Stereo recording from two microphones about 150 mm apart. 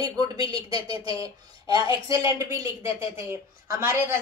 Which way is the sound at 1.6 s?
25° right (ahead or behind).